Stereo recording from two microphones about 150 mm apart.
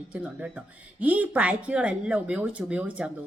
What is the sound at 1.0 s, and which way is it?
Speech, 10° right (ahead or behind).